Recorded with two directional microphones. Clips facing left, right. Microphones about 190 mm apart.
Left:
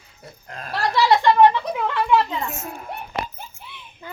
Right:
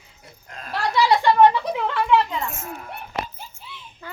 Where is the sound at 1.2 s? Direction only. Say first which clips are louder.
Even; 10° right (ahead or behind).